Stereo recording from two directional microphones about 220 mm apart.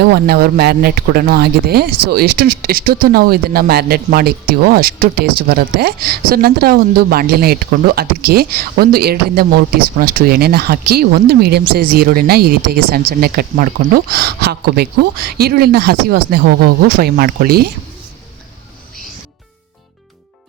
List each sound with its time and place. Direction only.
0.0 s speech: 45° right (ahead or behind)